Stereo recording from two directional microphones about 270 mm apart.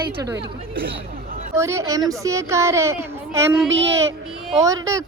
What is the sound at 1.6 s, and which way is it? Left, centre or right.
A man's voice, centre.